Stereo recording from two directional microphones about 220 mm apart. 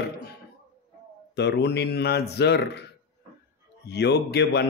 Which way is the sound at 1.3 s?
50° left (ahead or behind).